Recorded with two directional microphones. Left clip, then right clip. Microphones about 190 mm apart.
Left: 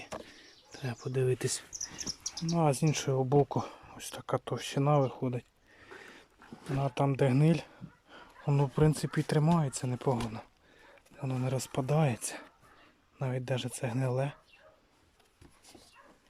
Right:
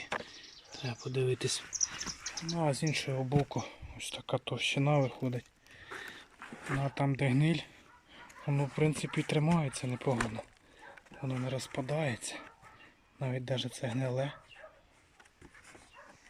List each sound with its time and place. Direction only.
0.7 s speech: centre (ahead or behind)
1.9 s a sound: 15° left (ahead or behind)
2.6 s speech: 5° left (ahead or behind)
6.7 s speech: 10° left (ahead or behind)
8.1 s a sound: 5° left (ahead or behind)
8.8 s speech: 5° left (ahead or behind)
11.6 s speech: 10° left (ahead or behind)